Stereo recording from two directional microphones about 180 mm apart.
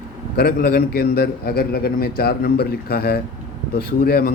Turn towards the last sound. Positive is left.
turn(degrees=55)  # may be behind; listen again after turning